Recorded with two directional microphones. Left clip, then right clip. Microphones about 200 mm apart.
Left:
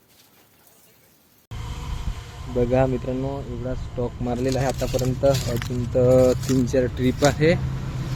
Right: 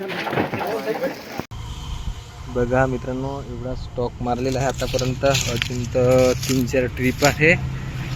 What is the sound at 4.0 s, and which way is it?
Speech, 35° right (ahead or behind).